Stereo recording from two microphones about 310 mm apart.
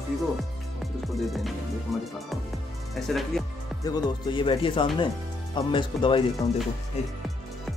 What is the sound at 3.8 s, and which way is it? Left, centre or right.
Speech, centre.